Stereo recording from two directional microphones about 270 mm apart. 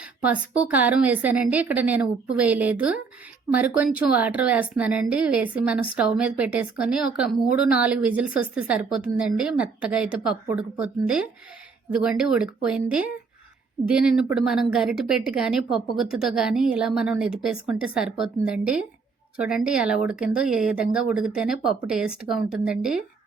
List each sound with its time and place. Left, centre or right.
0.0 s a woman's voice: centre